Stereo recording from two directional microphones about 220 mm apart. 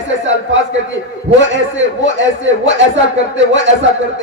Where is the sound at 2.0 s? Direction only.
60° right (ahead or behind).